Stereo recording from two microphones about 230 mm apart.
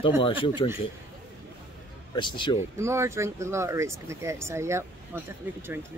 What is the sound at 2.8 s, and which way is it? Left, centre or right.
Speech, centre.